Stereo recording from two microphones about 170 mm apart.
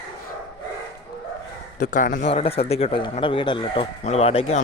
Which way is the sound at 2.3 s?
35° left (ahead or behind).